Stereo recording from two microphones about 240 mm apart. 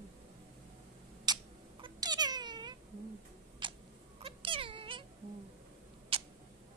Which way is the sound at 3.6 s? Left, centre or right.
Centre.